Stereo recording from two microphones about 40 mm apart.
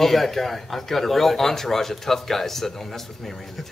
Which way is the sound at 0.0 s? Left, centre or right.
Centre.